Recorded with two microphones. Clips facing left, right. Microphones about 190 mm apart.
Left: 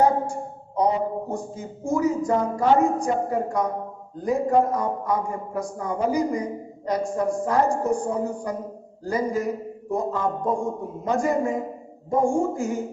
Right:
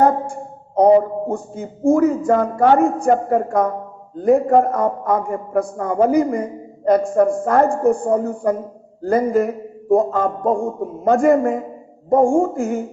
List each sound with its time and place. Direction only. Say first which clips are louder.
0.8 s a man's voice: right 10 dB; 55° right (ahead or behind)